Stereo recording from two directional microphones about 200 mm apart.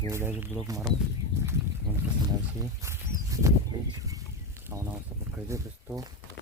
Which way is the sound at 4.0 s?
15° right (ahead or behind).